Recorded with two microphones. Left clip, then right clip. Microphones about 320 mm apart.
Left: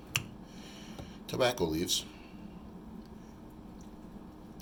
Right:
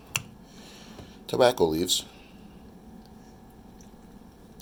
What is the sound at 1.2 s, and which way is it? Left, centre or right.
Speech, centre.